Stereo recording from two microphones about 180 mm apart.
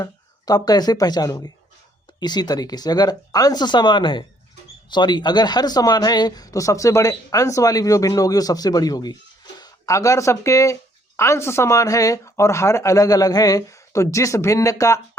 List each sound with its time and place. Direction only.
0.0 s speech: 20° left (ahead or behind)